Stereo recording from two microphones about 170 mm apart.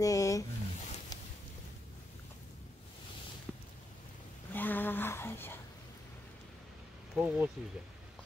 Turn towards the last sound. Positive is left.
turn(degrees=-5)  # may be behind; listen again after turning